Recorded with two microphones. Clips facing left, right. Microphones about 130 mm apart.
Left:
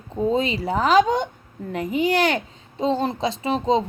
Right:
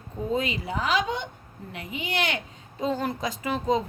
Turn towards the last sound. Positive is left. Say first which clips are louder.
# left 5 dB
turn(degrees=25)  # may be behind; listen again after turning